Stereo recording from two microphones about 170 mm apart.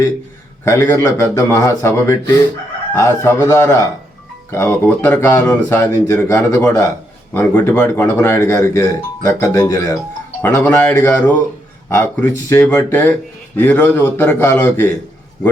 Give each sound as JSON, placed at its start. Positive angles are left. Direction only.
{"t": 0.6, "sound": "speech", "side_deg": 15}